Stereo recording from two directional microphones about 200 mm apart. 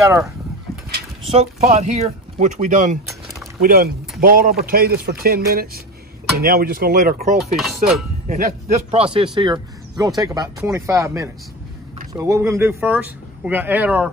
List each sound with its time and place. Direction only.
1.3 s speech: 35° right (ahead or behind)
7.5 s cutlery: centre (ahead or behind)
8.3 s speech: 35° right (ahead or behind); by 14.1 s 10° right (ahead or behind)